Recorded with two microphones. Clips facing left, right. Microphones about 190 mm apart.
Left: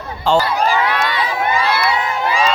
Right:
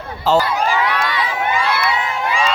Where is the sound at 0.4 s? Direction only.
35° left (ahead or behind).